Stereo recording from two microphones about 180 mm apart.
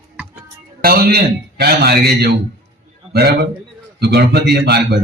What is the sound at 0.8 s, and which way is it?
Speech, 55° right (ahead or behind).